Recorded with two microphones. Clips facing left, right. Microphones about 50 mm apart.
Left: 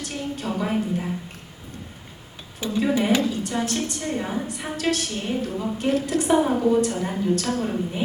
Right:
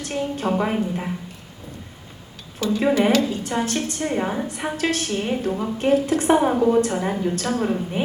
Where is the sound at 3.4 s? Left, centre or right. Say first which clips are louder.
Right 2 dB; right.